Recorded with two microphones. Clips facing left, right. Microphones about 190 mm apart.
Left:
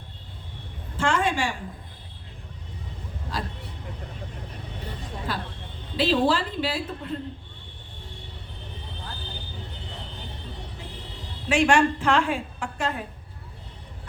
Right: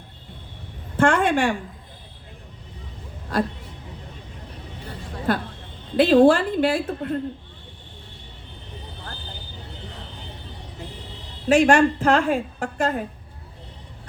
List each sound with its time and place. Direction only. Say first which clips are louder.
0.9 s a woman's voice: right 6 dB; 55° right (ahead or behind)
3.3 s a woman's voice: right 10 dB; 55° right (ahead or behind)
5.3 s a woman's voice: right 11 dB; 55° right (ahead or behind)
11.4 s a woman's voice: right 5 dB; 40° right (ahead or behind)